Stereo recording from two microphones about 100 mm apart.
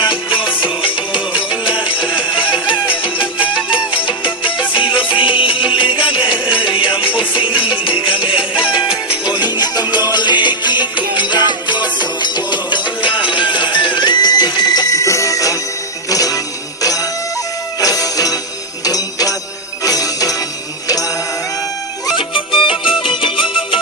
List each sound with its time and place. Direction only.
0.0 s music: 55° left (ahead or behind)
1.6 s music: 10° right (ahead or behind)
2.9 s music: 55° left (ahead or behind)
9.2 s music: 45° left (ahead or behind)
22.1 s music: 55° left (ahead or behind)